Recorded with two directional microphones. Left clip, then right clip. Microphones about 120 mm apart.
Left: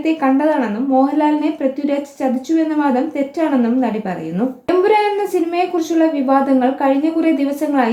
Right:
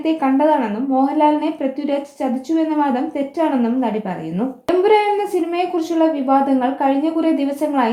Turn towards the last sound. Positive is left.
turn(degrees=-30)  # may be behind; listen again after turning